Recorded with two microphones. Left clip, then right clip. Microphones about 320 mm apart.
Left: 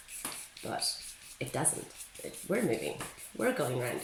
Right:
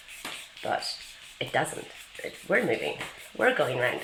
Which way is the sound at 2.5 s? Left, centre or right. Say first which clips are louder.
Right 8 dB; right.